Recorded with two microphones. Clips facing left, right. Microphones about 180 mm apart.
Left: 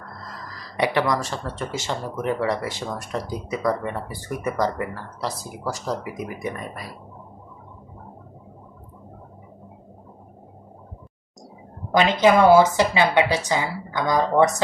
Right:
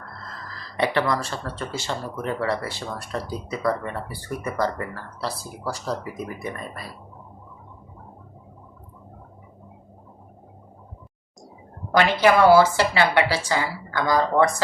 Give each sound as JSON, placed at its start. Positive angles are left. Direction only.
{"t": 0.3, "sound": "speech", "side_deg": 15}
{"t": 11.9, "sound": "a woman's voice", "side_deg": 15}